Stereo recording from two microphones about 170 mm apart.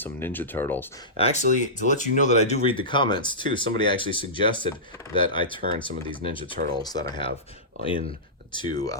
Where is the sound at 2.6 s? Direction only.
30° left (ahead or behind).